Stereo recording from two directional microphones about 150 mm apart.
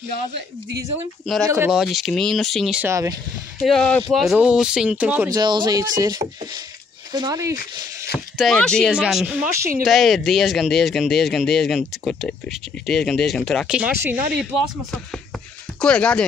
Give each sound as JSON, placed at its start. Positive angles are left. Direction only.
{"t": 1.2, "sound": "speech", "side_deg": 0}
{"t": 2.8, "sound": "speech", "side_deg": -20}
{"t": 3.6, "sound": "speech", "side_deg": 5}
{"t": 5.3, "sound": "speech", "side_deg": -30}
{"t": 8.1, "sound": "speech", "side_deg": 5}